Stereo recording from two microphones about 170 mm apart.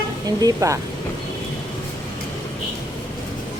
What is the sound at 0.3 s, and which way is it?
Speech, 20° right (ahead or behind).